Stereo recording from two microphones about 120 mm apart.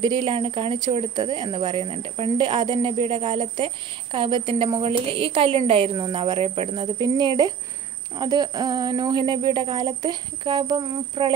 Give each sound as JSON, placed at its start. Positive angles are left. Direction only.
{"t": 0.0, "sound": "a woman's voice", "side_deg": -40}